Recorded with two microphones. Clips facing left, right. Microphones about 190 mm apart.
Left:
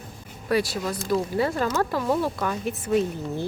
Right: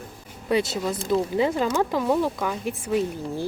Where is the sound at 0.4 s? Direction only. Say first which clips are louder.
Right 1 dB; 20° right (ahead or behind).